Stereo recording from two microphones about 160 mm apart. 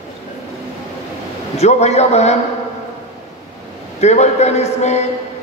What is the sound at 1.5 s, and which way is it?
Speech, 45° left (ahead or behind).